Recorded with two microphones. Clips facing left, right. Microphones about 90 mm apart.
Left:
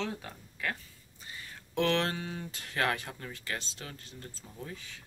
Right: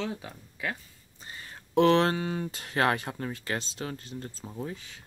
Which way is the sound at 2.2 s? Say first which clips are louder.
Right 8 dB; 50° right (ahead or behind).